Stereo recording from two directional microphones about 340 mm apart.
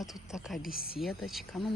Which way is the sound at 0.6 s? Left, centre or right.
Left.